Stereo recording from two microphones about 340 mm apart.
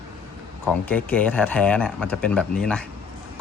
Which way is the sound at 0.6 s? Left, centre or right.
Centre.